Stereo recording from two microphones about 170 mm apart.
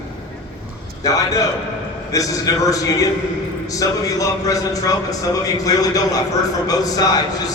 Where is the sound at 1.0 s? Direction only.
20° left (ahead or behind).